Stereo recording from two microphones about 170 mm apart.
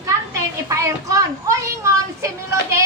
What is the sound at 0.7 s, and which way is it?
A woman's voice, 20° right (ahead or behind).